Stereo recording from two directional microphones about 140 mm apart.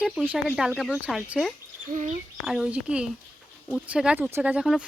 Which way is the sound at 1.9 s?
60° right (ahead or behind).